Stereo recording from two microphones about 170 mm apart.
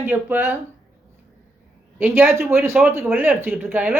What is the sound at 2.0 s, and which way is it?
Speech, 15° right (ahead or behind).